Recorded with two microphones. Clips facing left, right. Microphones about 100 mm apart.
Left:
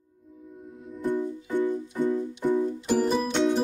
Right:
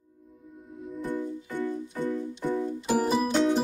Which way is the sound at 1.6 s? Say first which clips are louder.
Left 5 dB; 20° left (ahead or behind).